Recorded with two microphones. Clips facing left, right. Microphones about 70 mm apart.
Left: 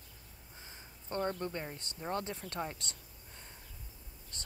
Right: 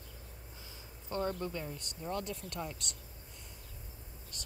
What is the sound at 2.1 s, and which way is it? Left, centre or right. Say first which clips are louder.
Speech: left 1 dB; left.